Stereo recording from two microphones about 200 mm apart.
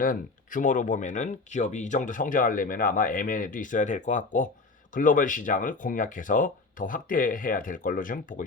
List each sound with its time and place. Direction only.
0.0 s speech: 40° left (ahead or behind)